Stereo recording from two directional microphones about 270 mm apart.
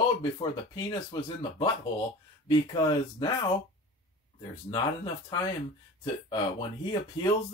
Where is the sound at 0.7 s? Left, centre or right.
Centre.